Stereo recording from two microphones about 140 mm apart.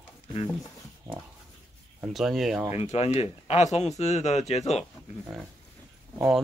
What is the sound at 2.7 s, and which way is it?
Speech, 50° left (ahead or behind).